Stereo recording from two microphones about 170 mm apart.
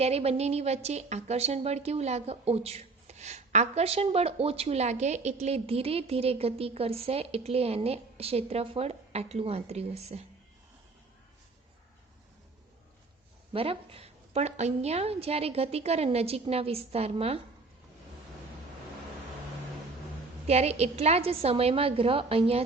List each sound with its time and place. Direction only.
0.0 s a woman's voice: 35° right (ahead or behind)
13.5 s a woman's voice: 35° right (ahead or behind)
20.5 s a woman's voice: 40° right (ahead or behind)